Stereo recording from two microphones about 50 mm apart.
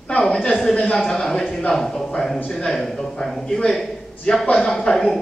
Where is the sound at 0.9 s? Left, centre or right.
Centre.